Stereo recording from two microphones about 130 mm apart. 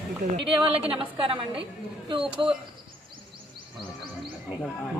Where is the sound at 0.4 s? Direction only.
40° right (ahead or behind).